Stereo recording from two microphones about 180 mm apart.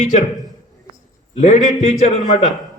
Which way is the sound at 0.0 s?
45° left (ahead or behind).